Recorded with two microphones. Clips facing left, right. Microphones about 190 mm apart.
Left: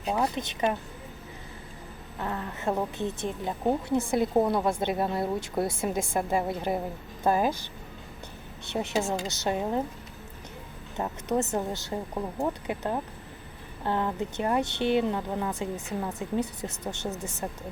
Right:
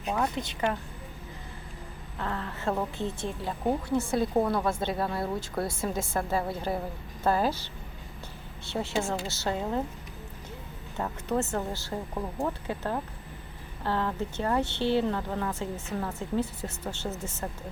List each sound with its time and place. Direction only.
0.1 s speech: 15° left (ahead or behind)
2.1 s a woman's voice: 15° left (ahead or behind)
10.9 s a woman's voice: 20° left (ahead or behind)